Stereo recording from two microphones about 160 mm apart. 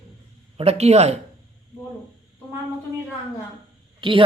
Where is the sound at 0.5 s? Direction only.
40° right (ahead or behind).